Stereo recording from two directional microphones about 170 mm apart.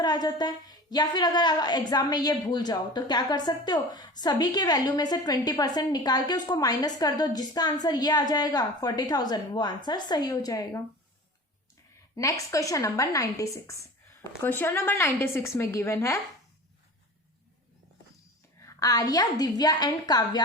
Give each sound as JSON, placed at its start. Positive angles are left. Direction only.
{"t": 0.0, "sound": "a woman's voice", "side_deg": 25}
{"t": 12.1, "sound": "a woman's voice", "side_deg": 20}
{"t": 18.6, "sound": "a woman's voice", "side_deg": 20}